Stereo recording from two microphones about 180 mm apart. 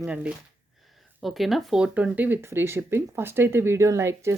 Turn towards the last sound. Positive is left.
turn(degrees=-15)  # may be behind; listen again after turning